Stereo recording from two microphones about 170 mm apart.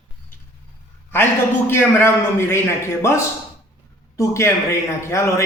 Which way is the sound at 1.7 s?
15° left (ahead or behind).